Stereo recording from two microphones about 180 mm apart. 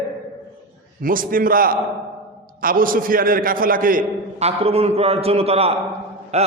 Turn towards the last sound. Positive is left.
turn(degrees=-35)  # may be behind; listen again after turning